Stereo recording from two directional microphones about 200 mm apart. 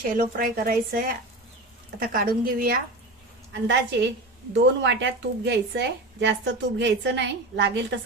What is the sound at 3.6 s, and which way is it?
A woman's voice, 60° right (ahead or behind).